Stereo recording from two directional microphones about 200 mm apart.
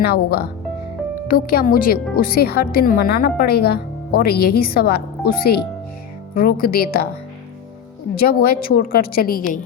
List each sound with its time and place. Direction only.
0.0 s speech: 50° left (ahead or behind)
8.1 s speech: 50° left (ahead or behind)